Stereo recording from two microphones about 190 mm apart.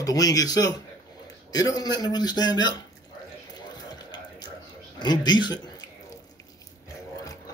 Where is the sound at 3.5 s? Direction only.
20° left (ahead or behind).